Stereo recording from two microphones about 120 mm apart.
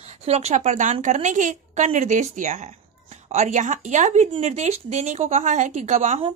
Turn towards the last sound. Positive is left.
turn(degrees=-70)  # may be behind; listen again after turning